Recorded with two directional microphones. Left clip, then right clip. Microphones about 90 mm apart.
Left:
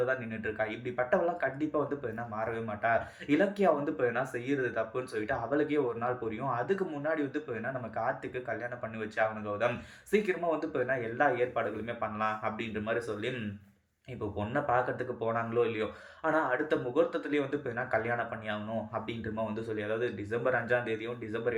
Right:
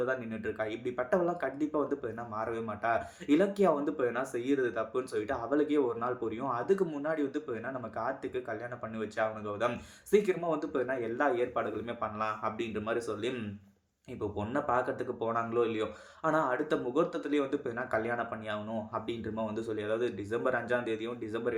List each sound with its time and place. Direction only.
0.0 s speech: 35° right (ahead or behind)
3.4 s speech: 30° right (ahead or behind); by 5.8 s 45° right (ahead or behind)
7.0 s speech: 40° right (ahead or behind)
9.0 s speech: 35° right (ahead or behind)
10.8 s speech: 30° right (ahead or behind)